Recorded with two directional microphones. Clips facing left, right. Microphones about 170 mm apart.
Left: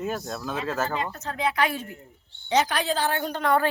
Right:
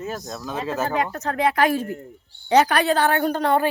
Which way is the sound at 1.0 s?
70° right (ahead or behind).